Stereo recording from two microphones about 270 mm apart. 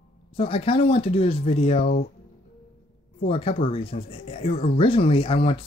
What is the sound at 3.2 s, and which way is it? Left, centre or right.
Speech, left.